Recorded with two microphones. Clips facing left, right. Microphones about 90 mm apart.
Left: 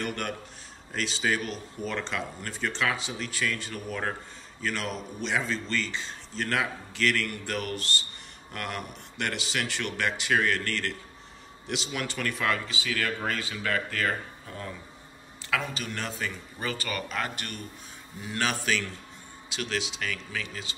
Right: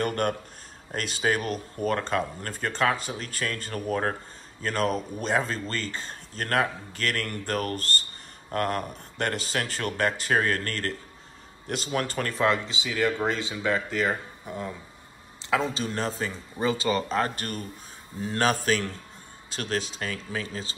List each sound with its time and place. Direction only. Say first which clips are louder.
0.0 s a man's voice: right 6 dB; 45° right (ahead or behind)
16.5 s speech: right 10 dB; 20° right (ahead or behind)
17.1 s a man's voice: right 6 dB; 35° right (ahead or behind)